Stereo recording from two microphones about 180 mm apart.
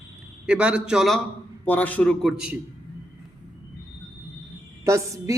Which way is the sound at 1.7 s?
10° left (ahead or behind).